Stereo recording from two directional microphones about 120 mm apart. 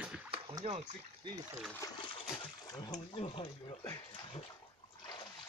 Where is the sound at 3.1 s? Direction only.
60° left (ahead or behind).